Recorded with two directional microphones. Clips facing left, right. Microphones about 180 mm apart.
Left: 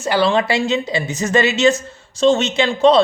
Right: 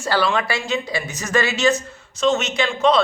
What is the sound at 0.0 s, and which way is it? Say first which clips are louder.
Speech: left 4 dB; 20° left (ahead or behind).